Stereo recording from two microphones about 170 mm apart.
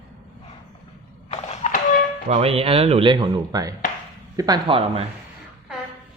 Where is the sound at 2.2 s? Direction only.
35° right (ahead or behind).